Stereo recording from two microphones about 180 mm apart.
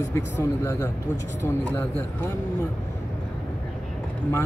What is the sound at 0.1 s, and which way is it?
Speech, 15° left (ahead or behind).